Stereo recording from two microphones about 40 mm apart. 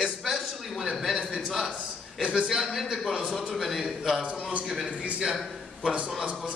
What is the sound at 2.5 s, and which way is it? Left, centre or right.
A man's voice, centre.